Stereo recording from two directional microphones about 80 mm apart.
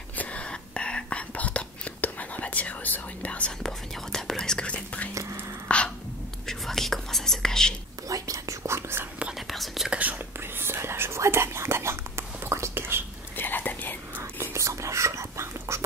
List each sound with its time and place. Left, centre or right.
0.2 s whispering: centre
5.7 s a sound: centre
6.4 s whispering: centre
8.1 s whispering: right
9.5 s whispering: centre
9.9 s whispering: right
13.4 s whispering: left
14.5 s whispering: right